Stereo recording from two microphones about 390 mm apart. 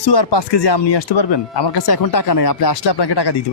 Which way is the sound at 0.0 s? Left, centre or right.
Left.